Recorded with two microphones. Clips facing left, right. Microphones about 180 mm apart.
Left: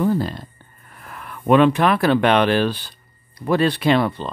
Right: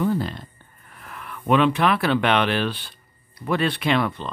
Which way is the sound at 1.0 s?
40° left (ahead or behind).